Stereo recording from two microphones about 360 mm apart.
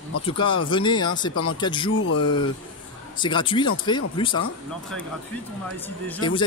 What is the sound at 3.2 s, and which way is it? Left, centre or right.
Speech, centre.